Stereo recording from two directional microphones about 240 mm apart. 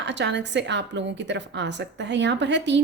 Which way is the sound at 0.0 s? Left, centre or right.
Right.